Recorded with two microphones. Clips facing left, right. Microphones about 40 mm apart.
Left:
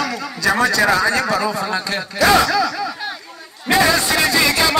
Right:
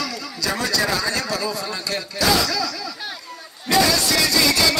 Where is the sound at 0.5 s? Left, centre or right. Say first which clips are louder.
Left 7 dB; left.